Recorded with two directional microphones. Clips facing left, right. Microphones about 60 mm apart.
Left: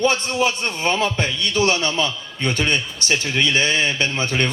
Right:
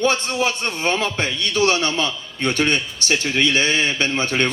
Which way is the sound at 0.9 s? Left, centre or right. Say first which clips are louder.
Left 1 dB; right.